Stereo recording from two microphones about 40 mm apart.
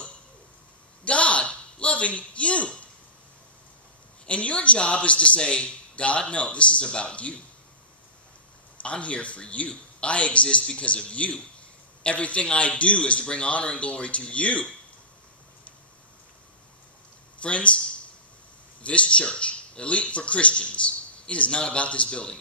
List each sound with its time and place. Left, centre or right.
1.0 s a sound: left
4.3 s a man's voice: left
8.8 s a man's voice: left
17.4 s a man's voice: left